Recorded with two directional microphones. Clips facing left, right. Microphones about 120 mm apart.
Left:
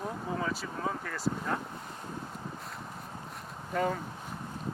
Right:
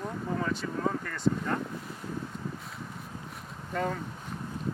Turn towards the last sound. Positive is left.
turn(degrees=5)  # may be behind; listen again after turning